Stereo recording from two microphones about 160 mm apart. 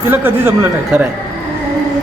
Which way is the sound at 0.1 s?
15° right (ahead or behind).